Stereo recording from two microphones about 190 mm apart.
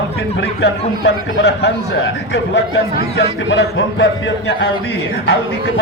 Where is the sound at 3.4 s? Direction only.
75° left (ahead or behind).